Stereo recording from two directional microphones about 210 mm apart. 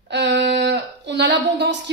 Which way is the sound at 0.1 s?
55° right (ahead or behind).